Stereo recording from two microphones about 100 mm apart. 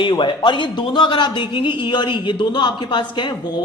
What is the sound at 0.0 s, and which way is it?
Speech, 55° left (ahead or behind).